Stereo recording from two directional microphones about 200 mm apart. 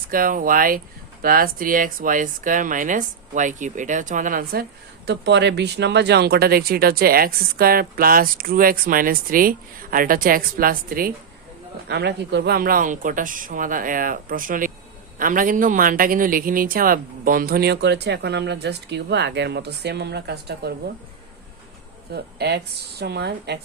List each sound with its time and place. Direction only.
0.1 s speech: 45° right (ahead or behind)
5.0 s speech: 60° right (ahead or behind)
22.1 s speech: 55° right (ahead or behind)